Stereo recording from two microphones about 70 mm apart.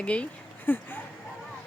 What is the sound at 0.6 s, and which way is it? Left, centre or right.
Speech, left.